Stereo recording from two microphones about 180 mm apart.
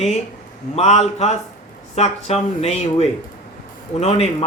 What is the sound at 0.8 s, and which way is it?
A man's voice, 35° left (ahead or behind).